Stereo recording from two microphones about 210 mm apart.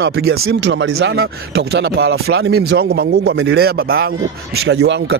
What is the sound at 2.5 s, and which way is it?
Speech, 90° right.